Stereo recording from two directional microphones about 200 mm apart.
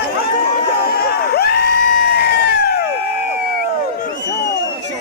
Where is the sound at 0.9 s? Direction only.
50° left (ahead or behind).